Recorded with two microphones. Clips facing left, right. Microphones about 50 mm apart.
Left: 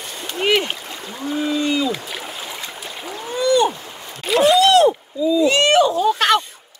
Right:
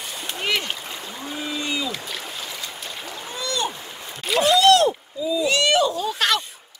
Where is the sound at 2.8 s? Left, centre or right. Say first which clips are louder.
Left 4 dB; centre.